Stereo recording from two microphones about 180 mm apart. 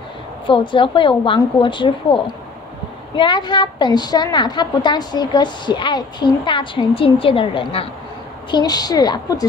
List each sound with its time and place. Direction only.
0.5 s a woman's voice: 30° left (ahead or behind)
3.2 s a woman's voice: 25° left (ahead or behind)